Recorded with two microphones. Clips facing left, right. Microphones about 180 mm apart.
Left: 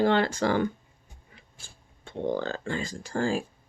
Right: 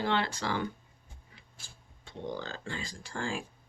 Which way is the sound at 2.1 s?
55° left (ahead or behind).